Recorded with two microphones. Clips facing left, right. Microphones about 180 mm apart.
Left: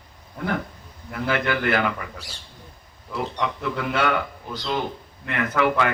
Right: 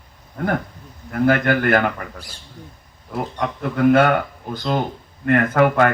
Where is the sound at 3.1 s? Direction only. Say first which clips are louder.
Right 2 dB; 50° right (ahead or behind).